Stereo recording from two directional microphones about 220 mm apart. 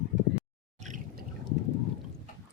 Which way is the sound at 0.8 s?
35° right (ahead or behind).